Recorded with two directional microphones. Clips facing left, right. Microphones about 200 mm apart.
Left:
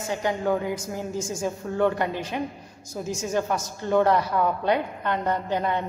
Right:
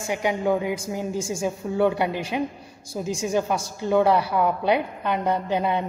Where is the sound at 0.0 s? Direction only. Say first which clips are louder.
Right 2 dB; 10° right (ahead or behind).